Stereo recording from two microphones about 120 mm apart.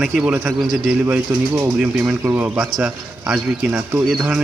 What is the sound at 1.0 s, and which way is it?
A man's voice, 20° right (ahead or behind).